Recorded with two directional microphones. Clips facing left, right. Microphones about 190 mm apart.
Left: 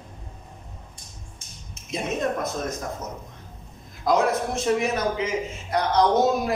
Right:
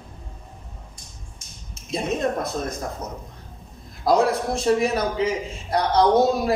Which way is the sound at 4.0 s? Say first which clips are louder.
Right 2 dB; 35° right (ahead or behind).